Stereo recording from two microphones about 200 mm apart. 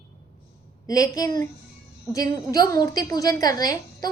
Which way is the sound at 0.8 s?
15° left (ahead or behind).